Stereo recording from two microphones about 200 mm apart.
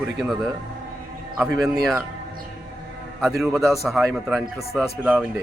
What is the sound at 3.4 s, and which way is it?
A man's voice, centre (ahead or behind).